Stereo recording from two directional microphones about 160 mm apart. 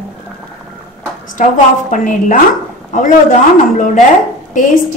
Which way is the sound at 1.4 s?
50° left (ahead or behind).